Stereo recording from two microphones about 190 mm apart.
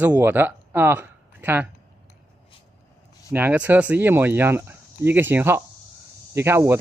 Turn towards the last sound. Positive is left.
turn(degrees=-15)  # may be behind; listen again after turning